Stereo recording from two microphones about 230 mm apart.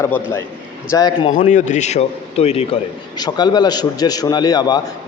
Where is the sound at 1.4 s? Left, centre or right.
Left.